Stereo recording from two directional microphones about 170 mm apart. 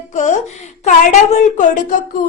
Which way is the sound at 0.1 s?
45° left (ahead or behind).